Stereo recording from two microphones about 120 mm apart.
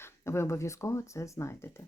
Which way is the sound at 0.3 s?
20° left (ahead or behind).